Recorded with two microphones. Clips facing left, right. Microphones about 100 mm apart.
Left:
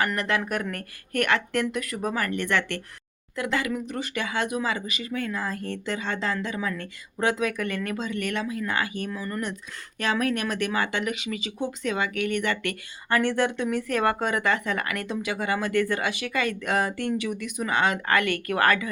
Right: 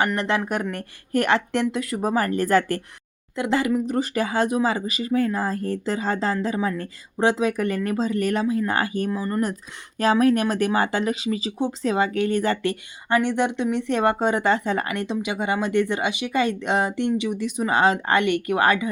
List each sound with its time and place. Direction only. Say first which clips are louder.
0.0 s speech: right 3 dB; 25° right (ahead or behind)
13.1 s speech: right 2 dB; 20° right (ahead or behind)